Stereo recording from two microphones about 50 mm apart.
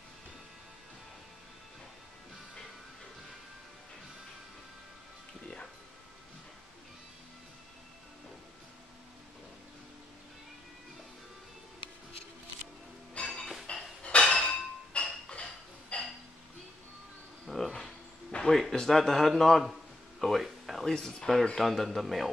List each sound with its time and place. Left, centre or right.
13.3 s music: centre
13.7 s a sound: left
17.5 s insect: centre
18.4 s a man's voice: centre
20.2 s a sound: centre
20.9 s speech: centre
21.5 s a man's voice: centre